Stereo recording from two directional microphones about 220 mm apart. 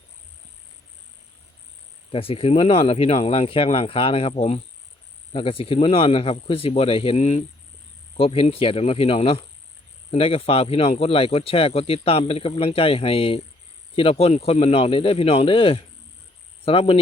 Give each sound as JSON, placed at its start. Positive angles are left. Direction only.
{"t": 2.0, "sound": "speech", "side_deg": 25}